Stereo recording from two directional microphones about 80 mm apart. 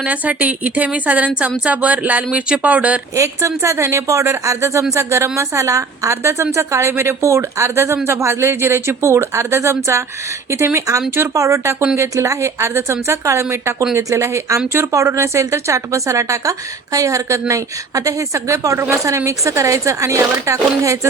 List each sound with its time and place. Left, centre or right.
0.0 s a woman's voice: centre
3.2 s a woman's voice: right